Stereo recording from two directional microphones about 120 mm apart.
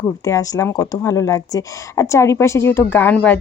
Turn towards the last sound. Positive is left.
turn(degrees=10)  # may be behind; listen again after turning